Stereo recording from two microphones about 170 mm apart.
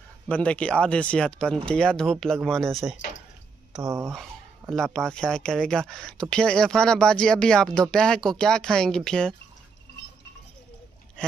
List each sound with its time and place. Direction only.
0.3 s speech: 10° left (ahead or behind)
3.8 s speech: 15° right (ahead or behind)
4.1 s speech: centre (ahead or behind)